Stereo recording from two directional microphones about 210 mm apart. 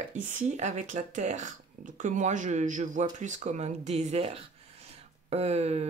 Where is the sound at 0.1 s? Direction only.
35° right (ahead or behind).